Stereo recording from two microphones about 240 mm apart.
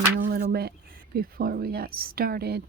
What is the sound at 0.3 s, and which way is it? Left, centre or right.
A woman's voice, right.